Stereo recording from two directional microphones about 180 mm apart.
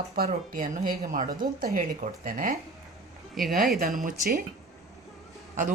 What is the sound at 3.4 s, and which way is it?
Speech, centre (ahead or behind).